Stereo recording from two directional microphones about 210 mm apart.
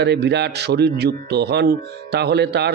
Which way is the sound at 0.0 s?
55° right (ahead or behind).